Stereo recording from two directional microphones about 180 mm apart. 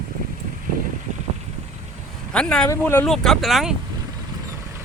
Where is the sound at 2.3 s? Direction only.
5° left (ahead or behind).